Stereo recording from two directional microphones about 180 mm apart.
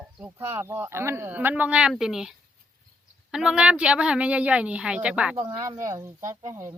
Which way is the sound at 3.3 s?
5° right (ahead or behind).